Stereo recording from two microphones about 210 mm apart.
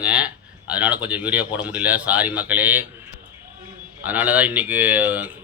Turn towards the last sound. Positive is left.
turn(degrees=-10)  # may be behind; listen again after turning